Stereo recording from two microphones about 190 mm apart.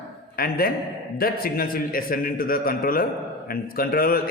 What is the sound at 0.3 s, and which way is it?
A man's voice, 50° left (ahead or behind).